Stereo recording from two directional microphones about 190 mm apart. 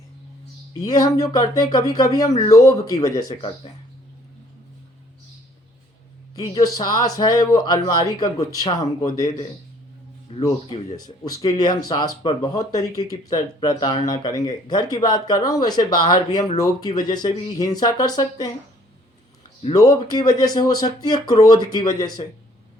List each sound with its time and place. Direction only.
0.7 s speech: 20° left (ahead or behind)
6.3 s speech: 20° left (ahead or behind)
19.7 s speech: 20° left (ahead or behind)